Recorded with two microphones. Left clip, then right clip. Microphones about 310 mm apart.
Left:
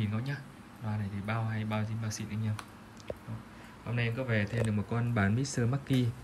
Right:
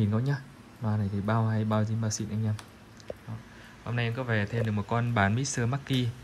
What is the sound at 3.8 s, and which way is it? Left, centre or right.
Speech, centre.